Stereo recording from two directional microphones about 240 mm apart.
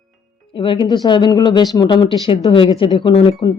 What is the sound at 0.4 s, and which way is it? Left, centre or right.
Speech, left.